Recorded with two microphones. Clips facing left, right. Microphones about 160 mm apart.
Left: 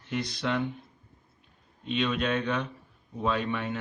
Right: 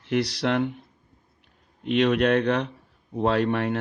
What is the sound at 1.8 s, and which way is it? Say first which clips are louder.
A man's voice: right 8 dB; 70° right (ahead or behind).